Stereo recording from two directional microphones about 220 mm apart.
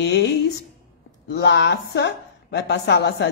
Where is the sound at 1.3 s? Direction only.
50° left (ahead or behind).